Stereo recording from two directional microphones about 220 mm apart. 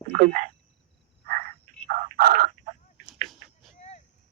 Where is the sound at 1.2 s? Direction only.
40° right (ahead or behind).